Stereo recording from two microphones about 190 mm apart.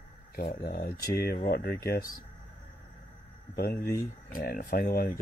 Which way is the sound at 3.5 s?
55° left (ahead or behind).